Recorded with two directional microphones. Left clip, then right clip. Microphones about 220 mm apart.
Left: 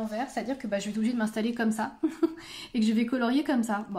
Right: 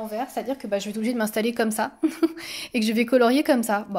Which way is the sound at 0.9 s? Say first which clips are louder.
Right 5 dB; 35° right (ahead or behind).